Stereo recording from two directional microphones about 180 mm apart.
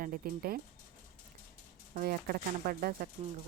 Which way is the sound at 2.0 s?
55° right (ahead or behind).